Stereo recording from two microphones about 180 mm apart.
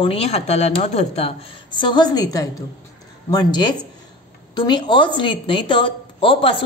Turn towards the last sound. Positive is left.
turn(degrees=30)  # may be behind; listen again after turning